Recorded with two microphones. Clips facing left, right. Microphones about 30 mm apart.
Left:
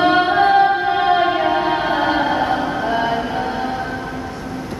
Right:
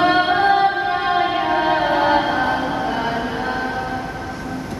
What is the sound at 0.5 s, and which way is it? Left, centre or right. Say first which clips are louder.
Music: left 3 dB; centre.